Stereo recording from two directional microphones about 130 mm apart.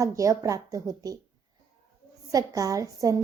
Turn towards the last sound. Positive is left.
turn(degrees=-25)  # may be behind; listen again after turning